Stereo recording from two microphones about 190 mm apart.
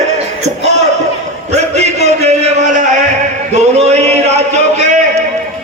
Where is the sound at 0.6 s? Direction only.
35° right (ahead or behind).